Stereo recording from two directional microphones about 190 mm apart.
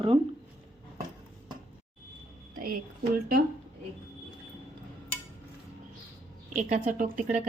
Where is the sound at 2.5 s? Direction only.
50° right (ahead or behind).